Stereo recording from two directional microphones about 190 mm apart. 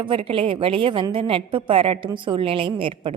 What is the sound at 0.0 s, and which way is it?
A woman's voice, 30° right (ahead or behind).